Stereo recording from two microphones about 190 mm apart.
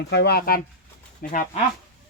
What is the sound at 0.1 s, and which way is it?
Speech, 60° left (ahead or behind).